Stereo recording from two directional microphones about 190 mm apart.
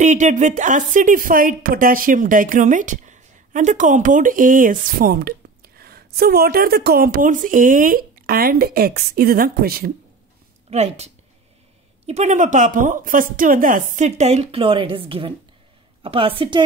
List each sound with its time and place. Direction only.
0.0 s a woman's voice: 40° right (ahead or behind)
10.7 s a woman's voice: 35° right (ahead or behind)
12.1 s a woman's voice: 40° right (ahead or behind)